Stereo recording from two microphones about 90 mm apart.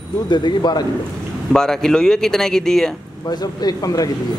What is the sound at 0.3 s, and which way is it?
Speech, 55° left (ahead or behind).